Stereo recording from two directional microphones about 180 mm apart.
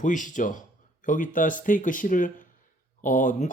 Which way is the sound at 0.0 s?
45° left (ahead or behind).